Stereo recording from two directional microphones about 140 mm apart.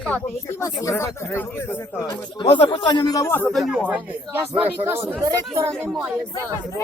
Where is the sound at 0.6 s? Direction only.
20° left (ahead or behind).